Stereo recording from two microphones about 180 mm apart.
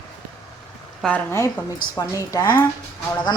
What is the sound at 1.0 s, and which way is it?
Speech, centre (ahead or behind).